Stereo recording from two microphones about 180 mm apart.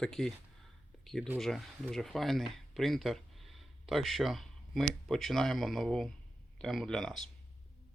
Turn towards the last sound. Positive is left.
turn(degrees=0)  # may be behind; listen again after turning